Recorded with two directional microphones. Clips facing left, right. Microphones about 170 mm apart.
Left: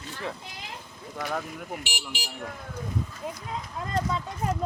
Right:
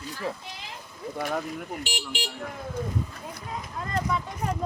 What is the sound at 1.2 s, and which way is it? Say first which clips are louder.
Speech: right 2 dB; 5° right (ahead or behind).